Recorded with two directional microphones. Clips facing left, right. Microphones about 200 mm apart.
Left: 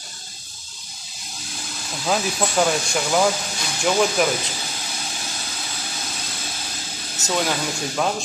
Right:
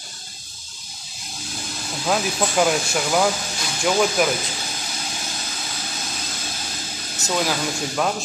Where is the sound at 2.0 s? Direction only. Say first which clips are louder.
Even; centre (ahead or behind).